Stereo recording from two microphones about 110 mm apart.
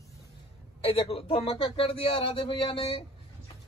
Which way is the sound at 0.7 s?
60° left (ahead or behind).